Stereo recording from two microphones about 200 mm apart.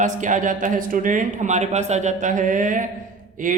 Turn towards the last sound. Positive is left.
turn(degrees=-40)  # may be behind; listen again after turning